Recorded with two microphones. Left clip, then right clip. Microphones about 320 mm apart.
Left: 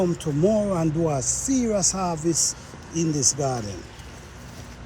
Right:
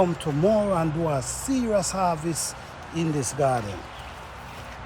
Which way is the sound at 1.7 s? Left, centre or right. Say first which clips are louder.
Right 5 dB; right.